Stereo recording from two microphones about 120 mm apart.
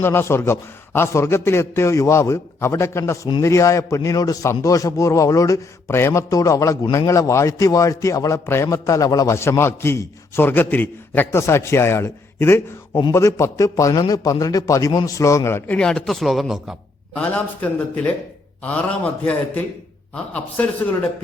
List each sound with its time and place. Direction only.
0.0 s a man's voice: 20° left (ahead or behind); by 16.7 s centre (ahead or behind)
17.2 s a man's voice: 15° left (ahead or behind)